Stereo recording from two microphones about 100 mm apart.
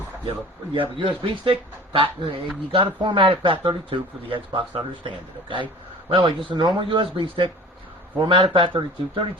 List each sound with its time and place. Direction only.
0.3 s speech: 60° right (ahead or behind)
2.7 s speech: 50° right (ahead or behind)